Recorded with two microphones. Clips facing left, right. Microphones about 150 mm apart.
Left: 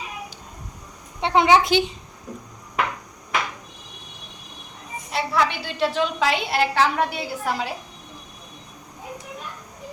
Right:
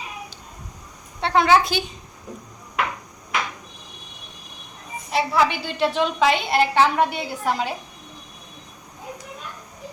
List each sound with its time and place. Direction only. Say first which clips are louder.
1.2 s a woman's voice: even; 20° left (ahead or behind)
5.1 s a woman's voice: right 3 dB; centre (ahead or behind)